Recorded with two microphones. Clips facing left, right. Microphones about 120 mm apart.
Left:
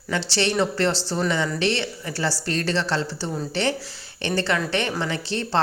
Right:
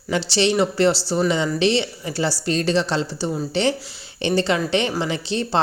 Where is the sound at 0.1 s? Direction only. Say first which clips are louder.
Right 4 dB; 15° right (ahead or behind).